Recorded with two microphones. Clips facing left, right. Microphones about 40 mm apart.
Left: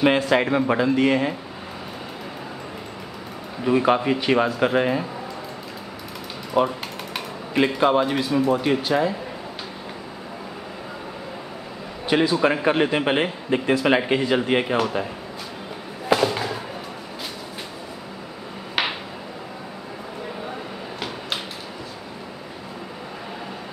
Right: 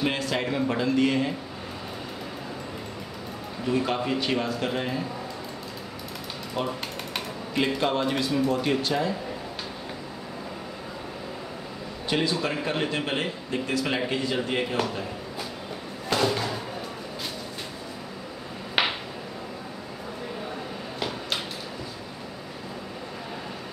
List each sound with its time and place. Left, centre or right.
0.3 s speech: left
3.6 s a man's voice: left
6.5 s speech: centre
12.1 s a man's voice: centre
16.2 s a sound: centre
18.8 s a sound: centre